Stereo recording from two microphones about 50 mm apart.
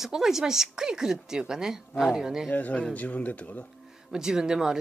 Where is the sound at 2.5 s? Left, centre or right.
Left.